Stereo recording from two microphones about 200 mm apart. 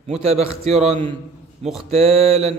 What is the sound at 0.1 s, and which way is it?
A man's voice, 30° right (ahead or behind).